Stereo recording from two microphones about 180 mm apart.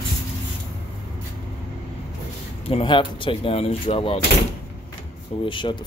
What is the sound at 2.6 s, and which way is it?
Speech, 30° left (ahead or behind).